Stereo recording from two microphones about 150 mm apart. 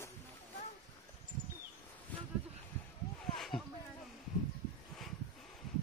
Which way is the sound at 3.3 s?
Centre (ahead or behind).